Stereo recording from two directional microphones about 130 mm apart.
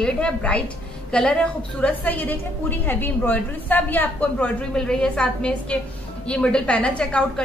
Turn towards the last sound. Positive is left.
turn(degrees=10)  # may be behind; listen again after turning